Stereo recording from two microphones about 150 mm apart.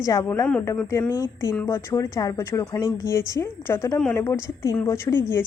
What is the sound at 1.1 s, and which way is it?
A woman's voice, 20° left (ahead or behind).